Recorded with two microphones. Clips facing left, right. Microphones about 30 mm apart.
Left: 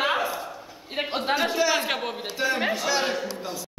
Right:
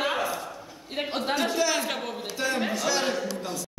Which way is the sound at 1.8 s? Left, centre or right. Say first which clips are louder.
Left 3 dB; centre.